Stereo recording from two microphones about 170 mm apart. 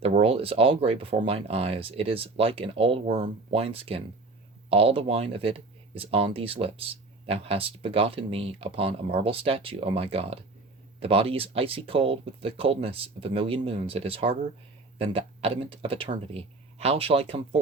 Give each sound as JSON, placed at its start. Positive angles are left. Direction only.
{"t": 0.0, "sound": "speech", "side_deg": -35}